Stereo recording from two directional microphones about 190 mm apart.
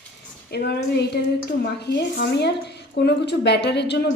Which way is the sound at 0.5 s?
60° left (ahead or behind).